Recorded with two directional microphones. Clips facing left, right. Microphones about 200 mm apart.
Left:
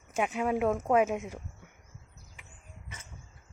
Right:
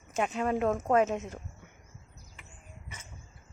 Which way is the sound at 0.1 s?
10° left (ahead or behind).